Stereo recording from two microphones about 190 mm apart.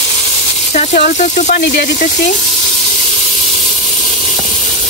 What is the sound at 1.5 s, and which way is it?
Speech, 60° left (ahead or behind).